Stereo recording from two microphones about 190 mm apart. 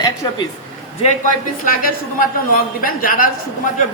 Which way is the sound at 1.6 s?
50° left (ahead or behind).